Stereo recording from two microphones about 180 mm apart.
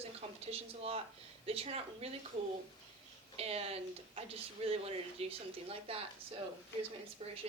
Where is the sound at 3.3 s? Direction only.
35° right (ahead or behind).